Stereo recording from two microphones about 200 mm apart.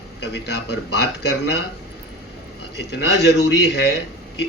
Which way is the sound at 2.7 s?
55° left (ahead or behind).